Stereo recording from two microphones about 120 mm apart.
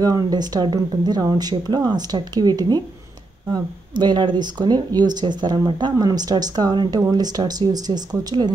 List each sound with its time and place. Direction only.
0.0 s speech: 35° right (ahead or behind)
4.0 s speech: 40° right (ahead or behind)